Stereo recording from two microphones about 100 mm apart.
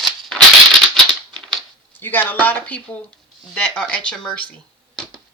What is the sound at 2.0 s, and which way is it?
Speech, 20° left (ahead or behind).